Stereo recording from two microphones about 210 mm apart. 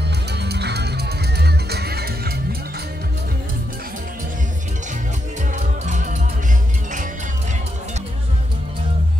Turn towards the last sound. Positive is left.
turn(degrees=-40)  # may be behind; listen again after turning